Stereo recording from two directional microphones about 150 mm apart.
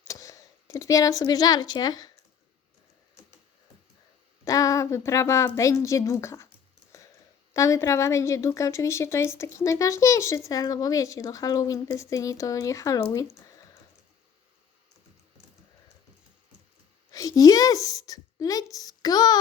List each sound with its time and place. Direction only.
0.1 s speech: 20° left (ahead or behind)
4.4 s a woman's voice: 25° left (ahead or behind)
7.5 s a woman's voice: 20° left (ahead or behind)
17.1 s speech: 25° left (ahead or behind)